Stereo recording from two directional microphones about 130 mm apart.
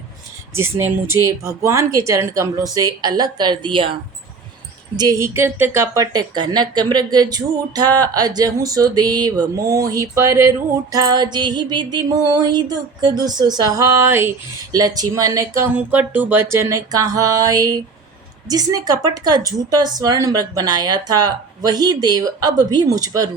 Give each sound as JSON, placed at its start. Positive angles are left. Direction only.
{"t": 0.5, "sound": "a woman's voice", "side_deg": -20}
{"t": 4.9, "sound": "a woman's voice", "side_deg": -25}
{"t": 15.7, "sound": "a woman's voice", "side_deg": -15}